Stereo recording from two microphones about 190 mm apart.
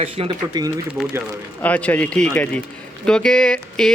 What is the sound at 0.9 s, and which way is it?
Speech, 5° right (ahead or behind).